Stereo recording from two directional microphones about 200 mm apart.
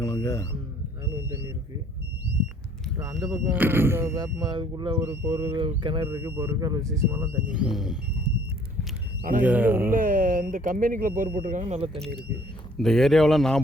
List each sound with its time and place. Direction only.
0.0 s a sound: 15° left (ahead or behind)
3.3 s speech: 10° right (ahead or behind)
9.4 s speech: 10° right (ahead or behind)
9.9 s speech: 40° right (ahead or behind)
12.7 s speech: centre (ahead or behind)